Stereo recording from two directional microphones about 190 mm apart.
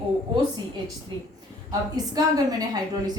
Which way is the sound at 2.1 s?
20° right (ahead or behind).